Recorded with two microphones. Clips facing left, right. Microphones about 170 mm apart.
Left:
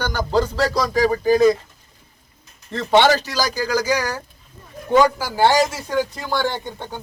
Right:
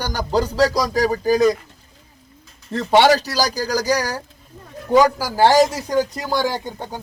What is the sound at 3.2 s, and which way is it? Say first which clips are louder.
Speech: right 1 dB; 40° right (ahead or behind).